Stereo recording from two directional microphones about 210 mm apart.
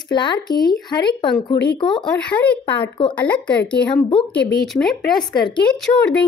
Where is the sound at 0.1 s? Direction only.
20° left (ahead or behind).